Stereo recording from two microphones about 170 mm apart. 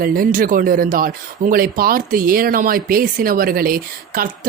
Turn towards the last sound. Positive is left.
turn(degrees=-55)  # may be behind; listen again after turning